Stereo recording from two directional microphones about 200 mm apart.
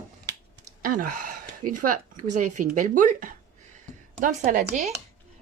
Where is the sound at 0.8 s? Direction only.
45° right (ahead or behind).